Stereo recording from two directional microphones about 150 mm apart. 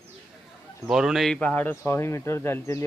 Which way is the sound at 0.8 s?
5° right (ahead or behind).